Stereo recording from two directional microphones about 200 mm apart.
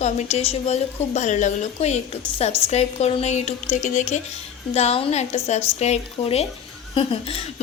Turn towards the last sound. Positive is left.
turn(degrees=25)  # may be behind; listen again after turning